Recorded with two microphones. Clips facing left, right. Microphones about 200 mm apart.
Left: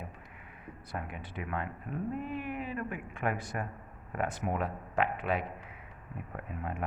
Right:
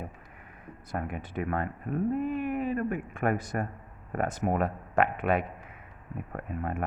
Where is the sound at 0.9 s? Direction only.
50° right (ahead or behind).